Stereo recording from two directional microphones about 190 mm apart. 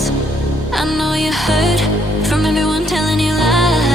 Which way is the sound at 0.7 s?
Centre (ahead or behind).